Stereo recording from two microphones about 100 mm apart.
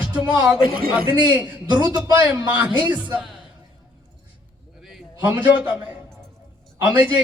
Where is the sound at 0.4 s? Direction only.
10° right (ahead or behind).